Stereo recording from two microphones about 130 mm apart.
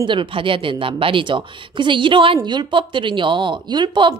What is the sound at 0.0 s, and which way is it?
A woman's voice, 40° right (ahead or behind).